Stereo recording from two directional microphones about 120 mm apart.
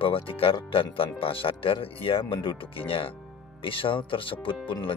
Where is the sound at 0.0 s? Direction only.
50° left (ahead or behind).